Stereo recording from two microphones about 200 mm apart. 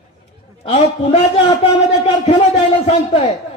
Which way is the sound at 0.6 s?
30° left (ahead or behind).